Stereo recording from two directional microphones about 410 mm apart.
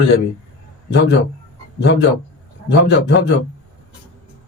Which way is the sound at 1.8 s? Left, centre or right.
Left.